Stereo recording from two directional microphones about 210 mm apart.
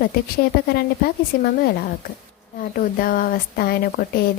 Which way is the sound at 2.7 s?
40° left (ahead or behind).